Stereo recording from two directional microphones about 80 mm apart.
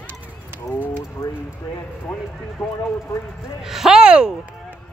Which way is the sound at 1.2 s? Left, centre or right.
Left.